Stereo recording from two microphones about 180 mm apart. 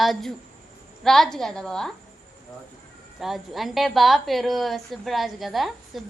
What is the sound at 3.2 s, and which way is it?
A woman's voice, centre (ahead or behind).